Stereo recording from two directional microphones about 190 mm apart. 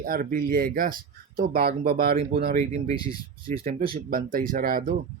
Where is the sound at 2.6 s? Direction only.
35° right (ahead or behind).